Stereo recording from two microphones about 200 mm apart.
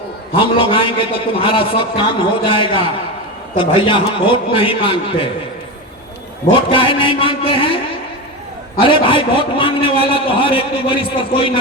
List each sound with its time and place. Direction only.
0.3 s a man's voice: 25° left (ahead or behind)
6.5 s a man's voice: 25° left (ahead or behind)
8.8 s a man's voice: 25° left (ahead or behind)